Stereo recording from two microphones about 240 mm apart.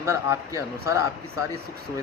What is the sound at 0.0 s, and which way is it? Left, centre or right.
Speech, centre.